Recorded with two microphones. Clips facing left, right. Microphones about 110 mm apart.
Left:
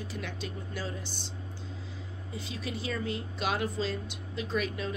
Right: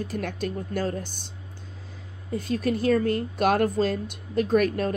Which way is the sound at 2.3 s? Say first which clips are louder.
Right 13 dB; 50° right (ahead or behind).